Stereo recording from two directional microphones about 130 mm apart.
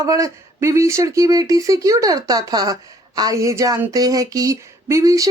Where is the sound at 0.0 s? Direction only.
25° right (ahead or behind).